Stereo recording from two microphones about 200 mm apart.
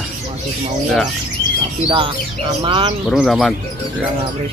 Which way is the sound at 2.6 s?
25° right (ahead or behind).